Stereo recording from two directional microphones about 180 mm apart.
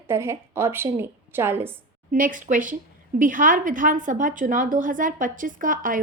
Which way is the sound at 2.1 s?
45° right (ahead or behind).